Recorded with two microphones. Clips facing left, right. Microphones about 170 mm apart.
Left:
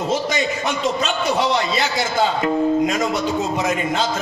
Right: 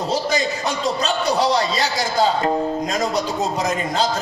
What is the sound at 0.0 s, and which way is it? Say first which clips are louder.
A man's voice: even; 35° right (ahead or behind).